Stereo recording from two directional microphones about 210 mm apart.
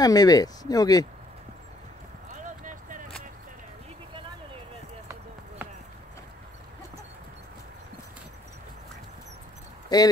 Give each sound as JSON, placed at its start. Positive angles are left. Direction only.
{"t": 0.0, "sound": "speech", "side_deg": 20}
{"t": 2.4, "sound": "a sound", "side_deg": -40}
{"t": 9.9, "sound": "speech", "side_deg": 20}